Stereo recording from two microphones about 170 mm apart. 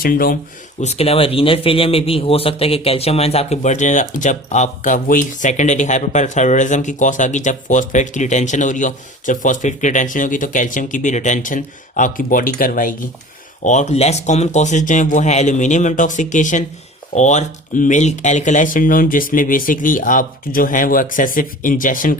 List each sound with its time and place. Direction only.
0.0 s speech: 60° left (ahead or behind)
0.8 s speech: 40° left (ahead or behind)
13.7 s speech: 45° left (ahead or behind)